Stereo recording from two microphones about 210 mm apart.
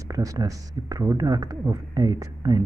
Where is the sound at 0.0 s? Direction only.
15° right (ahead or behind).